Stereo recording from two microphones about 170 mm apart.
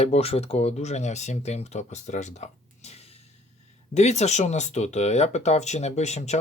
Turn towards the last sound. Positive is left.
turn(degrees=40)  # may be behind; listen again after turning